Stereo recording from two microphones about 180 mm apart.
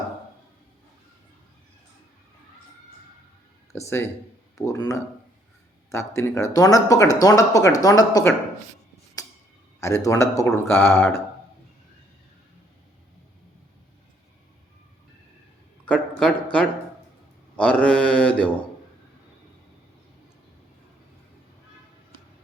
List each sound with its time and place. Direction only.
3.7 s speech: 15° left (ahead or behind)
9.8 s speech: 15° left (ahead or behind)
15.9 s a sound: 5° left (ahead or behind)
17.6 s mantra: 5° left (ahead or behind)